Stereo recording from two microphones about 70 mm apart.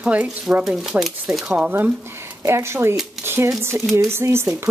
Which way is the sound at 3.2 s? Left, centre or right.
Right.